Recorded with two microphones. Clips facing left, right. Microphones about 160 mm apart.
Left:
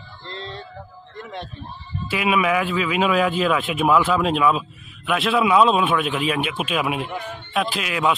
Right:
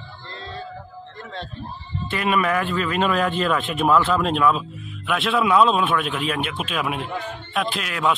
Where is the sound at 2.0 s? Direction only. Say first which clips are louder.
Left 1 dB; 5° left (ahead or behind).